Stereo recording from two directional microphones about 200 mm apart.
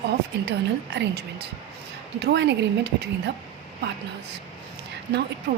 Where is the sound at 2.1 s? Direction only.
60° right (ahead or behind).